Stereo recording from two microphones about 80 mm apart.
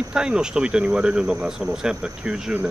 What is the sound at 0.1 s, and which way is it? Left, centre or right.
Speech, centre.